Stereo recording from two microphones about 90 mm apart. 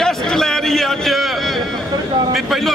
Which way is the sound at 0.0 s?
5° left (ahead or behind).